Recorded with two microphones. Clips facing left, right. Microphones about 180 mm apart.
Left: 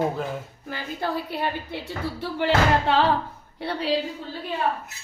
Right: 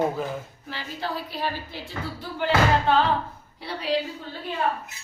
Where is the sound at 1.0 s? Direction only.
60° left (ahead or behind).